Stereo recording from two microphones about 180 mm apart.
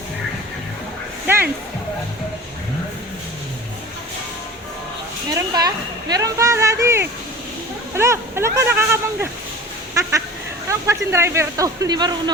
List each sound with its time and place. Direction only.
1.3 s music: 10° right (ahead or behind)
5.3 s speech: 20° right (ahead or behind)
9.9 s goose: 15° right (ahead or behind)
10.7 s speech: 15° right (ahead or behind)